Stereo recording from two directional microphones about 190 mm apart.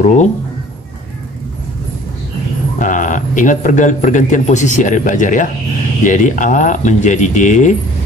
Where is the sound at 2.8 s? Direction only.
45° left (ahead or behind).